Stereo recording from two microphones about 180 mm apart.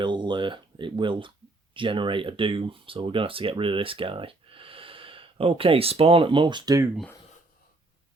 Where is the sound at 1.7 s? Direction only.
30° right (ahead or behind).